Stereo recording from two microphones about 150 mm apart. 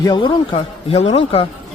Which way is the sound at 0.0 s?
30° left (ahead or behind).